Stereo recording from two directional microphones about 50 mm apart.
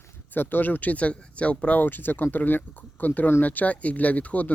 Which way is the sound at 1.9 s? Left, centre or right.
Left.